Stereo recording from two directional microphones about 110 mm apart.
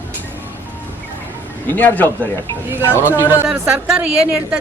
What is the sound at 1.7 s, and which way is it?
Speech, 15° left (ahead or behind).